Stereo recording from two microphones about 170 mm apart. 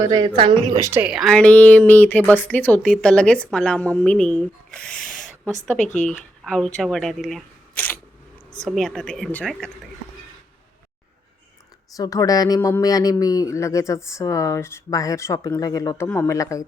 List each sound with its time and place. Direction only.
0.0 s speech: 25° right (ahead or behind)
0.9 s a woman's voice: 10° right (ahead or behind)
5.8 s speech: 45° left (ahead or behind)
6.4 s speech: 5° left (ahead or behind)
8.5 s speech: centre (ahead or behind)
11.9 s a woman's voice: 20° left (ahead or behind)